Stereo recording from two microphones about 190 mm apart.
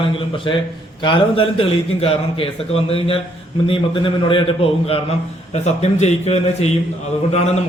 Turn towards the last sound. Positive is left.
turn(degrees=35)  # may be behind; listen again after turning